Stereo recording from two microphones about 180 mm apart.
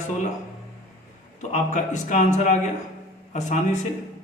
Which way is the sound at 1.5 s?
40° left (ahead or behind).